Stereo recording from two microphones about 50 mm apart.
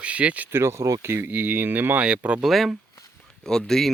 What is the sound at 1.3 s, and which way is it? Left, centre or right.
Speech, right.